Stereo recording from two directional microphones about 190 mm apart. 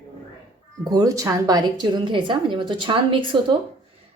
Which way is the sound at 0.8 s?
20° right (ahead or behind).